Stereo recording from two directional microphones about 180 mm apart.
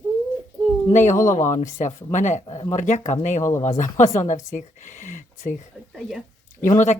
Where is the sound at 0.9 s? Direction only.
45° left (ahead or behind).